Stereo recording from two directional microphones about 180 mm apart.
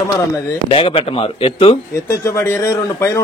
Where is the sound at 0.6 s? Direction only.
30° left (ahead or behind).